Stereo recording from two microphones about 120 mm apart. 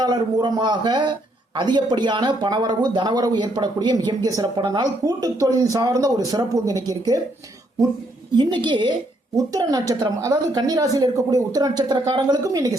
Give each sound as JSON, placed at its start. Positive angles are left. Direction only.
{"t": 0.0, "sound": "speech", "side_deg": -35}
{"t": 8.4, "sound": "speech", "side_deg": -40}
{"t": 9.3, "sound": "speech", "side_deg": -30}
{"t": 12.4, "sound": "a woman's voice", "side_deg": -30}